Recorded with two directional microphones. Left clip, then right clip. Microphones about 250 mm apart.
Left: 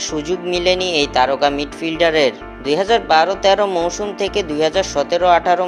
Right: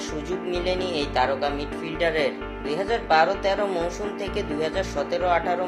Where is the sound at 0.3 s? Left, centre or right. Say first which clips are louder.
Left 10 dB; left.